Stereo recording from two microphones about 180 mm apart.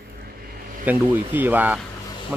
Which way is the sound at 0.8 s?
10° right (ahead or behind).